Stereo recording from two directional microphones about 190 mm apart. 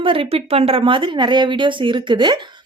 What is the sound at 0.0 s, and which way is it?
A woman's voice, 30° right (ahead or behind).